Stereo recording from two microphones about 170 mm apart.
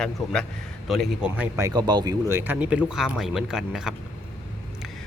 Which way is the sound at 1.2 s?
10° right (ahead or behind).